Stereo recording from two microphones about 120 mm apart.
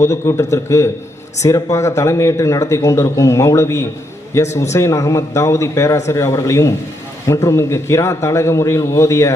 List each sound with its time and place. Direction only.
0.0 s speech: 25° left (ahead or behind)